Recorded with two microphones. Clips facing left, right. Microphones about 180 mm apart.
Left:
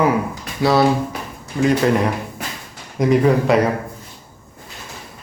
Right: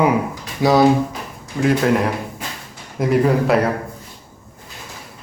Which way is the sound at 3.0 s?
5° right (ahead or behind).